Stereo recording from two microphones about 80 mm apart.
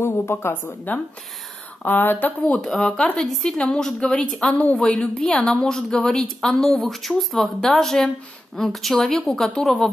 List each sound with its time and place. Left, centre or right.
0.0 s a woman's voice: left
2.5 s a woman's voice: centre